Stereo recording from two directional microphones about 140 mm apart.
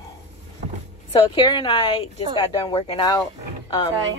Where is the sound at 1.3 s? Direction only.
35° left (ahead or behind).